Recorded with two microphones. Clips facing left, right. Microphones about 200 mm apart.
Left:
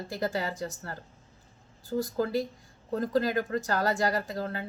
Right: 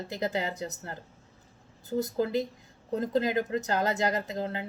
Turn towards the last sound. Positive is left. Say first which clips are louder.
# right 1 dB
turn(degrees=-20)  # may be behind; listen again after turning